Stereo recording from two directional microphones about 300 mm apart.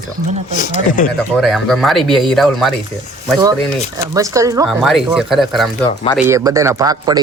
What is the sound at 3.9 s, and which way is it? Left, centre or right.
A man's voice, centre.